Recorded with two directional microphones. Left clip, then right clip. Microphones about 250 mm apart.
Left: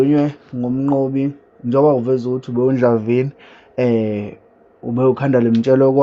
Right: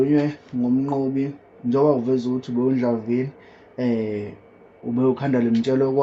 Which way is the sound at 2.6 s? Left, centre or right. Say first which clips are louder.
Left 8 dB; left.